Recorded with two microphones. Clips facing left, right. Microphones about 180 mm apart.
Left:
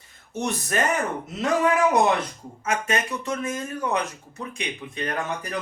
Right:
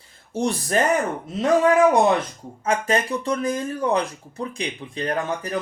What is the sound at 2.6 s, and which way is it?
Speech, 35° right (ahead or behind).